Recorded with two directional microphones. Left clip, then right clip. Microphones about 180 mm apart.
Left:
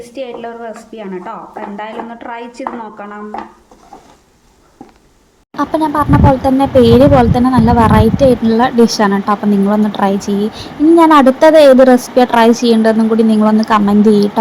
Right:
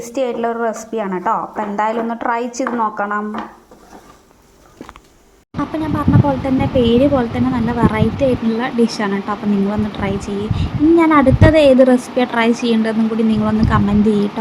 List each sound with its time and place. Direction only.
0.0 s a woman's voice: 20° right (ahead or behind)
5.5 s speech: 30° left (ahead or behind)